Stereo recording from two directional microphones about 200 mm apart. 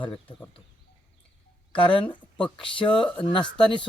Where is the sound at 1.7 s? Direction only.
25° left (ahead or behind).